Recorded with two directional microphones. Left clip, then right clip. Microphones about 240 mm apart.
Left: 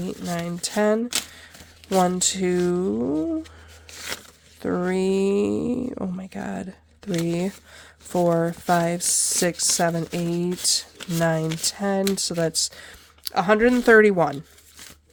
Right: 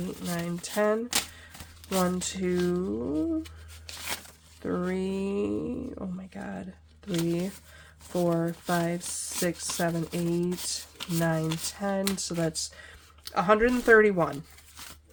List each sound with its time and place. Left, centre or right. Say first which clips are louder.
0.3 s speech: left 6 dB; left
4.6 s speech: left 7 dB; left